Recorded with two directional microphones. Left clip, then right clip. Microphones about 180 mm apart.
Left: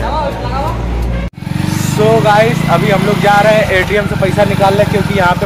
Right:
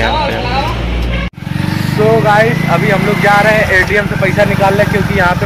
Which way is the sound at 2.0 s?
5° left (ahead or behind).